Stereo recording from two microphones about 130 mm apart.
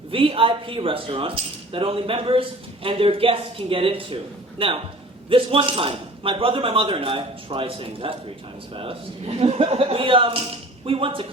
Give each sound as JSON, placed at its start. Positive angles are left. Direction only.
{"t": 0.1, "sound": "speech", "side_deg": -45}